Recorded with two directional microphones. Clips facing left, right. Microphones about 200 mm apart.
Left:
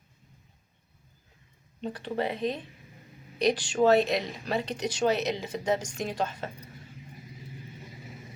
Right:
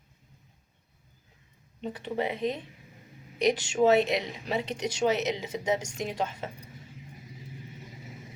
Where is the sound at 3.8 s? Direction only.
20° right (ahead or behind).